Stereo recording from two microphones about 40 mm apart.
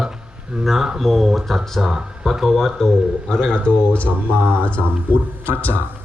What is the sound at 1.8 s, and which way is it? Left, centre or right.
Speech, centre.